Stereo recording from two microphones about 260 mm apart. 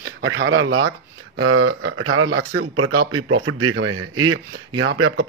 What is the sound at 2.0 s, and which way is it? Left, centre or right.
A man's voice, right.